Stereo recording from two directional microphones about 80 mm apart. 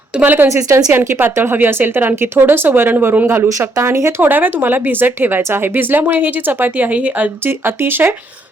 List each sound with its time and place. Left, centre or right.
0.2 s speech: right
0.4 s a woman's voice: right
0.9 s speech: right
7.4 s speech: right